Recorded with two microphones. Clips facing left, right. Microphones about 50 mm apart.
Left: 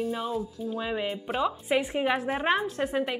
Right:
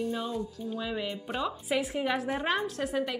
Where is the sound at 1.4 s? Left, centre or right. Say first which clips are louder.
Left 4 dB; centre.